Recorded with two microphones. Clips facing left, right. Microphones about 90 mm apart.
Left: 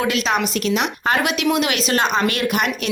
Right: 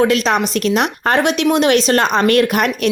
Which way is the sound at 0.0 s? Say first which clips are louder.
Right 5 dB; 40° right (ahead or behind).